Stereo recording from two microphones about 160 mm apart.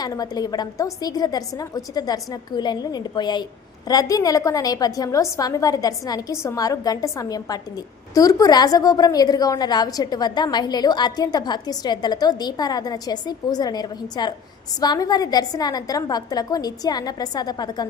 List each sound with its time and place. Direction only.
0.0 s a woman's voice: 25° left (ahead or behind)